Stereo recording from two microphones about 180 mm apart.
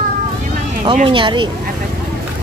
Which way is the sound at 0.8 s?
30° right (ahead or behind).